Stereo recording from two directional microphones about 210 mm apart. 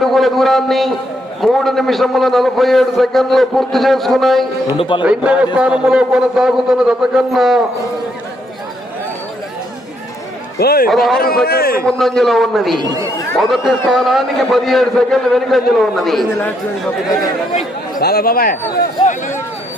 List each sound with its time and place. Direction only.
0.0 s a man's voice: centre (ahead or behind)
4.8 s a man's voice: 25° left (ahead or behind)
5.0 s a man's voice: 5° right (ahead or behind)
10.6 s speech: 45° left (ahead or behind)
10.8 s a man's voice: centre (ahead or behind)
11.4 s speech: 45° left (ahead or behind)
11.9 s a man's voice: centre (ahead or behind)
12.7 s speech: 20° right (ahead or behind)
13.5 s a man's voice: centre (ahead or behind)
18.0 s speech: 45° left (ahead or behind)